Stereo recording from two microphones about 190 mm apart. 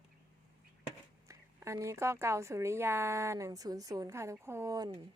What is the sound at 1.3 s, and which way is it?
Speech, 15° right (ahead or behind).